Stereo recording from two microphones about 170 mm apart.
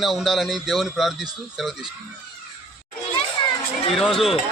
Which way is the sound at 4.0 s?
Centre (ahead or behind).